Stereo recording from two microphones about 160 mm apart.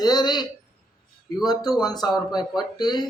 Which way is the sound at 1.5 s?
25° left (ahead or behind).